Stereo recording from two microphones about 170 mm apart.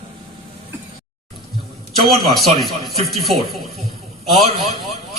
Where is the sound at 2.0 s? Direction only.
Centre (ahead or behind).